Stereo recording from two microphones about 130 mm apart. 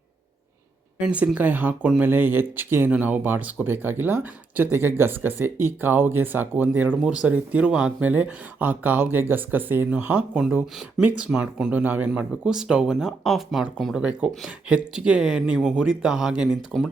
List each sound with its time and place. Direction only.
0.9 s speech: 10° right (ahead or behind)